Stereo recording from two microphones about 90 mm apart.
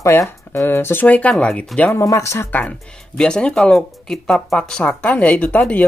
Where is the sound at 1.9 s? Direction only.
35° left (ahead or behind).